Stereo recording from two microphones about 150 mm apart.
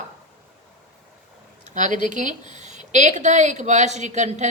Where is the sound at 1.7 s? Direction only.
55° right (ahead or behind).